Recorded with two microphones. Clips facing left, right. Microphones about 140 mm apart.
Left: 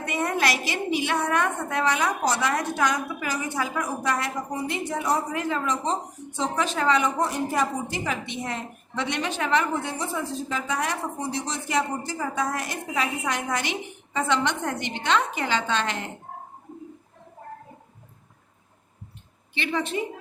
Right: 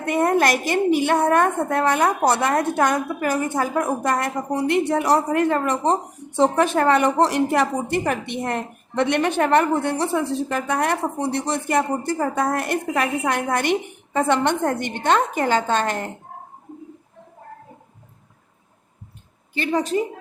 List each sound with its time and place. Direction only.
0.0 s a woman's voice: 50° right (ahead or behind)
4.5 s a woman's voice: 65° right (ahead or behind)
19.5 s a woman's voice: 40° right (ahead or behind)